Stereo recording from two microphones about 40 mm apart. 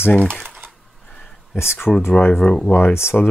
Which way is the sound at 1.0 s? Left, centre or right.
Left.